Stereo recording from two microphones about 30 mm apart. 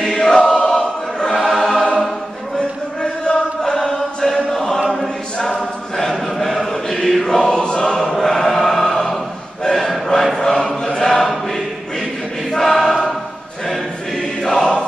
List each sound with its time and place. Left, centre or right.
0.0 s choir: left
1.2 s choir: centre
2.5 s a sound: left
3.6 s chant: centre
4.8 s choir: centre
5.4 s choir: left
5.9 s choir: centre
6.2 s chant: centre
7.5 s choir: left